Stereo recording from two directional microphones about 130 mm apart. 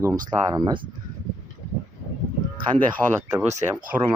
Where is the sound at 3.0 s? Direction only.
5° left (ahead or behind).